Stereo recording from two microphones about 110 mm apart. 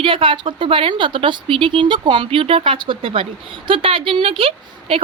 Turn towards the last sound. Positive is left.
turn(degrees=-55)  # may be behind; listen again after turning